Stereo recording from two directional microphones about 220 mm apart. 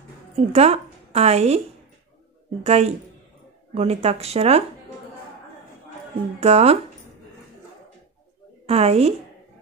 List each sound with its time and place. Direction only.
0.5 s speech: 30° right (ahead or behind)
2.6 s speech: 30° right (ahead or behind)
6.4 s speech: 30° right (ahead or behind)
8.6 s speech: 30° right (ahead or behind)